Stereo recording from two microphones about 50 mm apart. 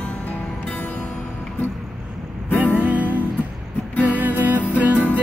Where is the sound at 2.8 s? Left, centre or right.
Right.